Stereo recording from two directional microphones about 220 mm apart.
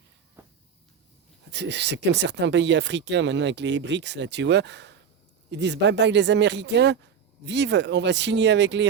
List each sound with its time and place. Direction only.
1.5 s speech: 50° right (ahead or behind)